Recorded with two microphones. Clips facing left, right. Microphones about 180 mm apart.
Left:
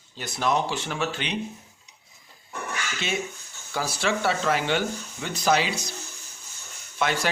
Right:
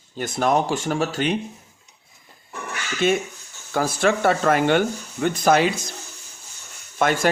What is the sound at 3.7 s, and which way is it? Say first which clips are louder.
Speech: right 6 dB; 50° right (ahead or behind).